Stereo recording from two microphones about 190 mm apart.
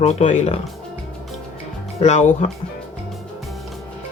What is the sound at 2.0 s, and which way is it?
Speech, 35° left (ahead or behind).